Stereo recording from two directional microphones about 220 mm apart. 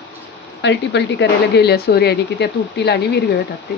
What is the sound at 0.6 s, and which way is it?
A woman's voice, 55° left (ahead or behind).